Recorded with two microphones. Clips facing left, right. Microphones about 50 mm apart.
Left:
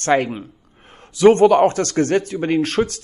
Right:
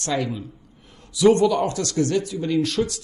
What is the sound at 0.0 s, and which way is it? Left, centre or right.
Speech, left.